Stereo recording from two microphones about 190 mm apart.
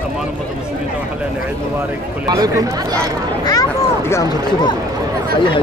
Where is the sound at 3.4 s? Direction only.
20° left (ahead or behind).